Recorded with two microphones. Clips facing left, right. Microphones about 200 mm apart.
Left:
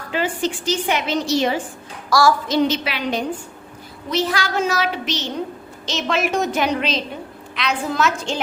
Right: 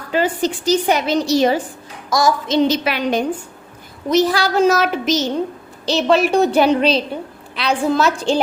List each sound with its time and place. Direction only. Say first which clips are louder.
0.1 s a woman's voice: right 4 dB; 40° right (ahead or behind)
2.0 s a woman's voice: even; 20° right (ahead or behind)
2.6 s a woman's voice: right 4 dB; 45° right (ahead or behind)